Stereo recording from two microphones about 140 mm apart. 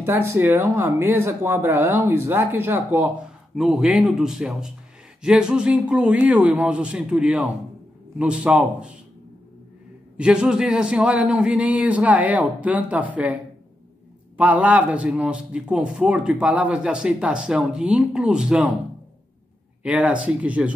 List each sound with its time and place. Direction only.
0.0 s a man's voice: 15° right (ahead or behind)
3.5 s a man's voice: 5° right (ahead or behind)
10.1 s a man's voice: 5° right (ahead or behind)
19.8 s a man's voice: 10° right (ahead or behind)